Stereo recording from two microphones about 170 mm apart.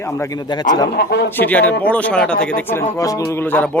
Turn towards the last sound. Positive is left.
turn(degrees=10)  # may be behind; listen again after turning